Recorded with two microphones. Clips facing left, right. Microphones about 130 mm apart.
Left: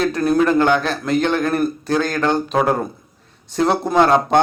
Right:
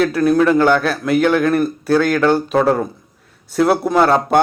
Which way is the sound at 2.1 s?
15° left (ahead or behind).